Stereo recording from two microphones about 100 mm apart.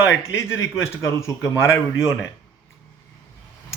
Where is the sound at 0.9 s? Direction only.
30° left (ahead or behind).